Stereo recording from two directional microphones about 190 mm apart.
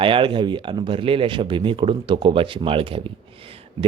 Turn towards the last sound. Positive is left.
turn(degrees=-30)  # may be behind; listen again after turning